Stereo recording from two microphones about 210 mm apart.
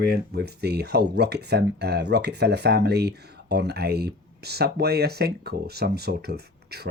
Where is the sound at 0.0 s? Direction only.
50° right (ahead or behind).